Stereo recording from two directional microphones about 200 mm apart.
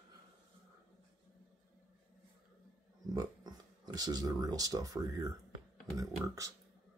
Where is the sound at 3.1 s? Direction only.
20° right (ahead or behind).